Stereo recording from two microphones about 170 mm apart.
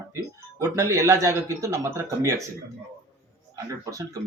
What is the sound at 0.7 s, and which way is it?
A man's voice, 20° right (ahead or behind).